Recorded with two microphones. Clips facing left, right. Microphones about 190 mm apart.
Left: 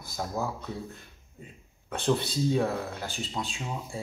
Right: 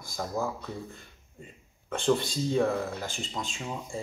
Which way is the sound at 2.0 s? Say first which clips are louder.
Even; 5° left (ahead or behind).